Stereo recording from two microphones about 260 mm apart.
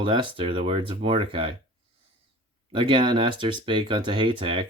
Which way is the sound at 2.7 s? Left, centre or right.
Centre.